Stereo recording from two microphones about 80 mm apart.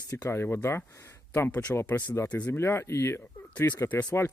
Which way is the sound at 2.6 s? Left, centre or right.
Left.